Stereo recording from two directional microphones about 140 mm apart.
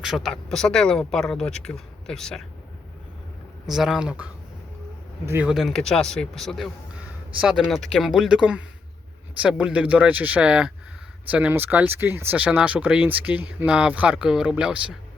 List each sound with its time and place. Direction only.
0.0 s speech: centre (ahead or behind)
3.7 s speech: 5° right (ahead or behind)
5.2 s speech: 15° right (ahead or behind)
5.5 s speech: centre (ahead or behind)